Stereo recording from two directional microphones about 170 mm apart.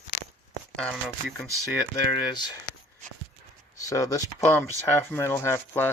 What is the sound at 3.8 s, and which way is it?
Speech, 20° left (ahead or behind).